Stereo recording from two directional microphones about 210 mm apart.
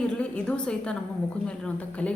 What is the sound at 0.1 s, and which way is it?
A woman's voice, 5° left (ahead or behind).